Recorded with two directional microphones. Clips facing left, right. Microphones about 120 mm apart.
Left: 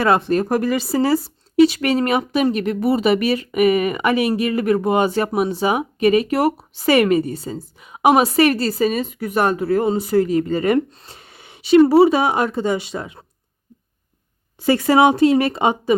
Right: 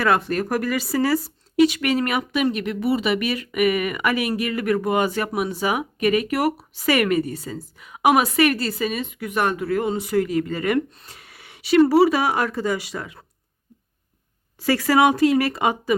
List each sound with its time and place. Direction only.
0.0 s a woman's voice: 25° left (ahead or behind)
14.6 s a woman's voice: 25° left (ahead or behind)